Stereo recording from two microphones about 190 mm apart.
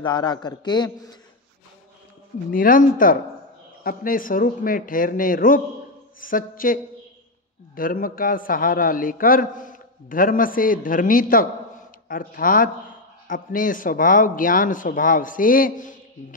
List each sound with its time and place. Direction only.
0.0 s a man's voice: 25° left (ahead or behind)
2.5 s a man's voice: 45° left (ahead or behind)